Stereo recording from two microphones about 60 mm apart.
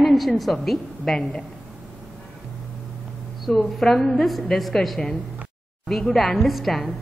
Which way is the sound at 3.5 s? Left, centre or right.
Centre.